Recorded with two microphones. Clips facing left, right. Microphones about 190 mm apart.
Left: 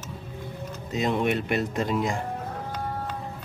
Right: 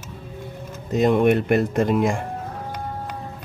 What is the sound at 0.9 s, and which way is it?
Speech, 55° right (ahead or behind).